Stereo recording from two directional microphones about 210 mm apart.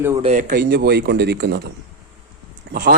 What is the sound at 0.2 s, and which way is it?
Speech, 35° right (ahead or behind).